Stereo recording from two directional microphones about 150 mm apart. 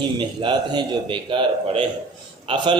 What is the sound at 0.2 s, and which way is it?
Speech, 30° right (ahead or behind).